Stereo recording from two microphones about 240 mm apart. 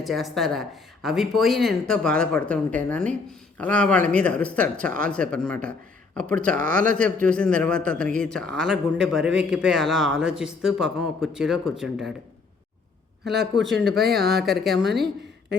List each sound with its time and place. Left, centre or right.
0.0 s a man's voice: centre
6.6 s speech: right
7.3 s a man's voice: centre
13.4 s a man's voice: centre
14.0 s speech: right
14.4 s a man's voice: centre